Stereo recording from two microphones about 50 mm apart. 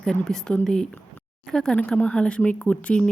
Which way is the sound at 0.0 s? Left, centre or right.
Centre.